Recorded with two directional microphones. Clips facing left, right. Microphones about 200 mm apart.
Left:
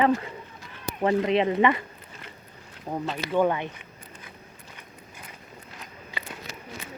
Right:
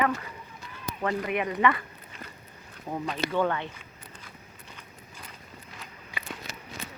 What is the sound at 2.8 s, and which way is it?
Speech, 15° left (ahead or behind).